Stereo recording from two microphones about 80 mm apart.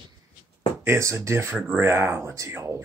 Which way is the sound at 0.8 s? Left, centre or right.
Right.